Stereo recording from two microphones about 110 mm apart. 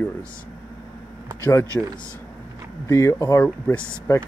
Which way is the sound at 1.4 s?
25° left (ahead or behind).